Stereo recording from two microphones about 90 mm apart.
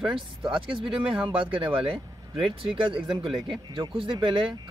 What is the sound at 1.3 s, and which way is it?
Speech, 75° right (ahead or behind).